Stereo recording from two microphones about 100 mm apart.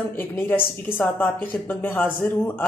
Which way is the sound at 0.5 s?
20° left (ahead or behind).